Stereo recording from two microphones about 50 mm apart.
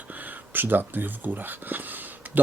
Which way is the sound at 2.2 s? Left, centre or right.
Right.